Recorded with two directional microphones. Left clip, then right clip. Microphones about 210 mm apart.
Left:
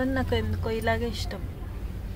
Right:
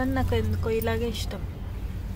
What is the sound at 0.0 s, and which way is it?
Speech, 15° left (ahead or behind).